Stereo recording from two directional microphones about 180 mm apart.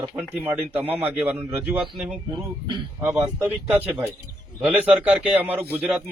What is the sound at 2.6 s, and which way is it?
Speech, 25° right (ahead or behind).